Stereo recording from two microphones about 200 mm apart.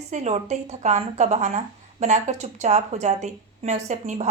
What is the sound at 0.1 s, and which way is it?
Speech, 35° right (ahead or behind).